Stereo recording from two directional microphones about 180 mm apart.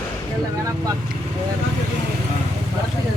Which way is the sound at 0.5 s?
20° right (ahead or behind).